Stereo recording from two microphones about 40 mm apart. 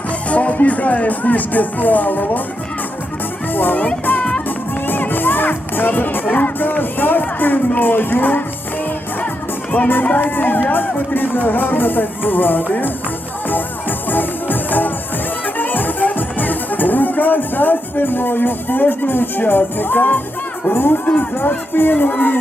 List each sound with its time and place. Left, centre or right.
0.3 s speech: left
3.5 s speech: left
4.9 s music: left
6.3 s speech: left
9.7 s speech: left
14.1 s music: left
20.7 s speech: left